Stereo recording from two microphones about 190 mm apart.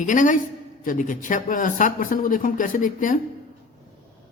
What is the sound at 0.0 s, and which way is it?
A woman's voice, 40° left (ahead or behind).